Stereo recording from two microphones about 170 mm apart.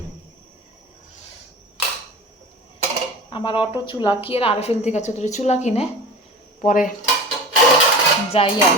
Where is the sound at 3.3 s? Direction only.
30° left (ahead or behind).